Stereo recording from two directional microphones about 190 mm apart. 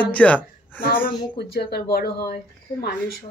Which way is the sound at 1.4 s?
55° left (ahead or behind).